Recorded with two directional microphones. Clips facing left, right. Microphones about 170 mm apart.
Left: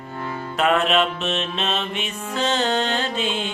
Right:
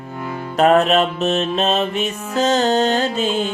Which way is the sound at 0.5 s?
40° right (ahead or behind).